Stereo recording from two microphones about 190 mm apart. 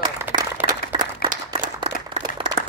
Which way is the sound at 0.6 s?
25° right (ahead or behind).